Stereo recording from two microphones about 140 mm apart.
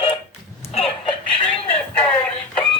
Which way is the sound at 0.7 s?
40° left (ahead or behind).